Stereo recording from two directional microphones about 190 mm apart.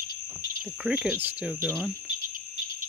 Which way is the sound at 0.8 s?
5° right (ahead or behind).